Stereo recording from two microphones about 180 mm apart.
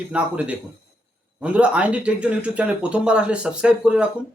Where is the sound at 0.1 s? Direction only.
5° right (ahead or behind).